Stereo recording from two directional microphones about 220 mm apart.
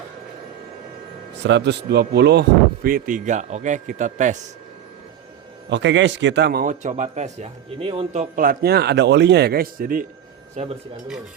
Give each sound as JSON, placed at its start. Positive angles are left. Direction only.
{"t": 1.4, "sound": "speech", "side_deg": -50}
{"t": 5.6, "sound": "a man's voice", "side_deg": -55}
{"t": 10.5, "sound": "speech", "side_deg": -30}